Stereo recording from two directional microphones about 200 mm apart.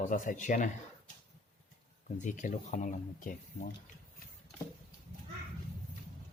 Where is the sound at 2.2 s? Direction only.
40° left (ahead or behind).